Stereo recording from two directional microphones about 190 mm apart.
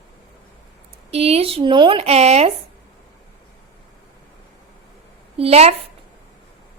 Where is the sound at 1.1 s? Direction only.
30° right (ahead or behind).